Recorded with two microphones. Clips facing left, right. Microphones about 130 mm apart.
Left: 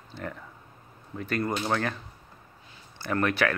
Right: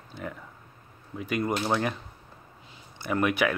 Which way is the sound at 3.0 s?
10° right (ahead or behind).